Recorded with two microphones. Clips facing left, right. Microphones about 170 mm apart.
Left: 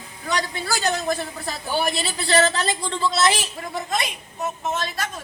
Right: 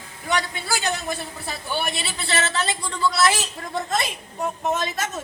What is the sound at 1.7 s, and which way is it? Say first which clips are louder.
A man's voice: left 4 dB; 40° left (ahead or behind).